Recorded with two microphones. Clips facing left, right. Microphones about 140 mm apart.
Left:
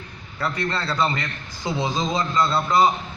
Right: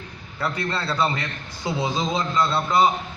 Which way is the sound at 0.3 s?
5° right (ahead or behind).